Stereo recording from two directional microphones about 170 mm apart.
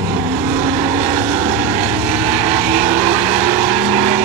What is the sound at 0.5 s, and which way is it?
Vehicle, 10° right (ahead or behind).